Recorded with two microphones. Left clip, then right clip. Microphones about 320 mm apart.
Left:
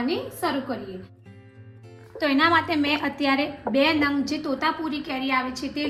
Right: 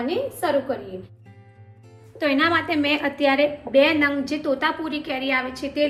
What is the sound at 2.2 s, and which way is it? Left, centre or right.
A woman's voice, centre.